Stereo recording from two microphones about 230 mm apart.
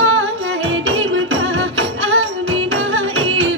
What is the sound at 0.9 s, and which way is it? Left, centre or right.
Music, right.